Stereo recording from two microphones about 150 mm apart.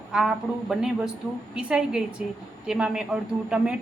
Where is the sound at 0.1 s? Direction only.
5° right (ahead or behind).